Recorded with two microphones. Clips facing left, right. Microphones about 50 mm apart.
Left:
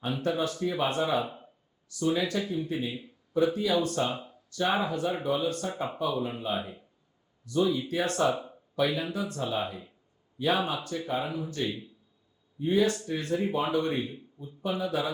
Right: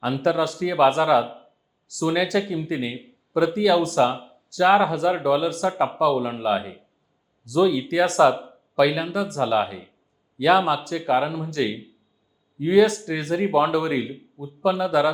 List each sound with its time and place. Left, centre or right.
0.0 s a man's voice: right